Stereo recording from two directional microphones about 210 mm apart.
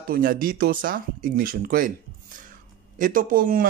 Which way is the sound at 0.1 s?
40° right (ahead or behind).